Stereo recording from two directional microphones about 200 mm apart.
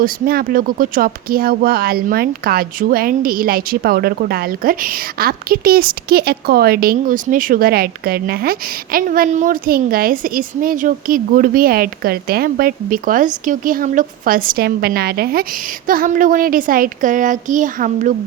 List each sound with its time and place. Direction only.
0.0 s speech: 45° right (ahead or behind)